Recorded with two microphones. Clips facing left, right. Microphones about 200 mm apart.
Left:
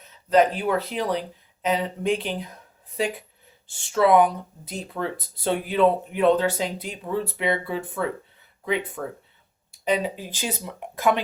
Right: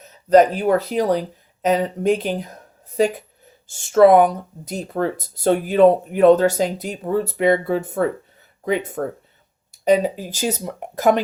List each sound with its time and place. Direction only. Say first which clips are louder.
0.0 s speech: right 6 dB; 40° right (ahead or behind)